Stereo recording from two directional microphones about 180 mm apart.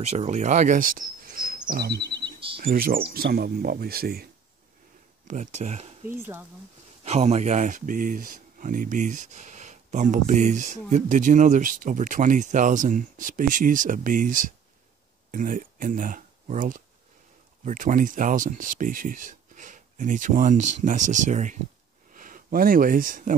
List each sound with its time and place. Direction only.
0.1 s speech: 40° right (ahead or behind)
1.7 s chirp: 65° right (ahead or behind)
2.2 s bird: 30° right (ahead or behind)
2.6 s speech: 55° right (ahead or behind)
5.2 s speech: 45° right (ahead or behind)
7.1 s speech: 35° right (ahead or behind)